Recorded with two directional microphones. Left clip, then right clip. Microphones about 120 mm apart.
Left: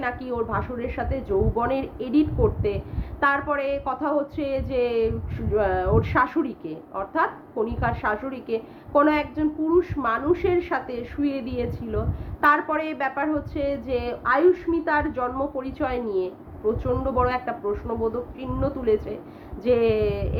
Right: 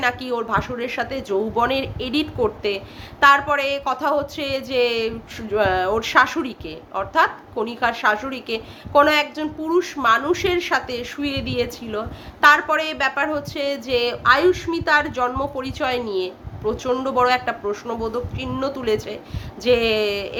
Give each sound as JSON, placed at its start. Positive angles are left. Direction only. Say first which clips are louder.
{"t": 0.0, "sound": "speech", "louder": "right 5 dB", "side_deg": -20}